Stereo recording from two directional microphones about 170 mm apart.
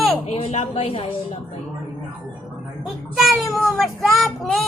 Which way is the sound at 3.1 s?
Centre (ahead or behind).